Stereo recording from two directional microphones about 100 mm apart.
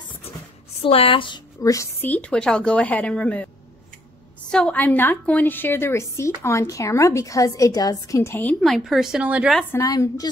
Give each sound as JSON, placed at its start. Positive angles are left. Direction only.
{"t": 0.8, "sound": "speech", "side_deg": 70}
{"t": 1.6, "sound": "a woman's voice", "side_deg": 30}
{"t": 2.0, "sound": "a woman's voice", "side_deg": 15}
{"t": 4.5, "sound": "a woman's voice", "side_deg": 10}
{"t": 8.5, "sound": "a woman's voice", "side_deg": 0}
{"t": 9.8, "sound": "a woman's voice", "side_deg": 35}